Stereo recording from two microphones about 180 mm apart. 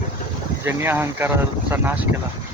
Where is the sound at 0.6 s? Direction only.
15° right (ahead or behind).